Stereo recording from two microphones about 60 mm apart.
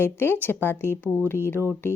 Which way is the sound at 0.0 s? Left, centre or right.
Left.